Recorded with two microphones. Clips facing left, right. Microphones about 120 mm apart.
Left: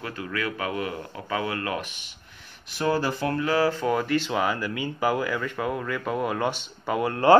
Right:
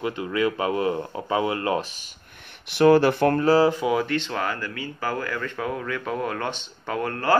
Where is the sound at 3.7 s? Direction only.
10° right (ahead or behind); by 7.2 s 5° left (ahead or behind).